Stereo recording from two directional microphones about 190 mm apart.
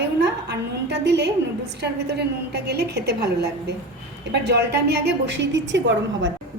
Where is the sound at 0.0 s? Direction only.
60° right (ahead or behind).